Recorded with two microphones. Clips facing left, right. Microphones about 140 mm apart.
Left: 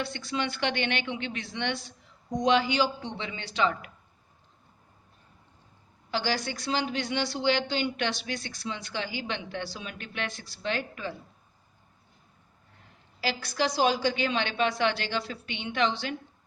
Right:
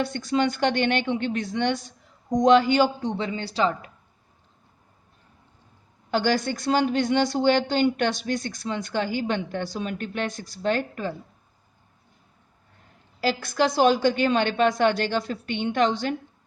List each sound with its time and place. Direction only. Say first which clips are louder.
0.0 s a woman's voice: right 8 dB; 45° right (ahead or behind)
6.1 s a woman's voice: right 7 dB; 50° right (ahead or behind)
13.2 s a woman's voice: right 6 dB; 50° right (ahead or behind)